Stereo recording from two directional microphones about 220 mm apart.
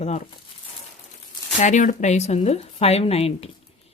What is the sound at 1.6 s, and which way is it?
A woman's voice, 35° left (ahead or behind).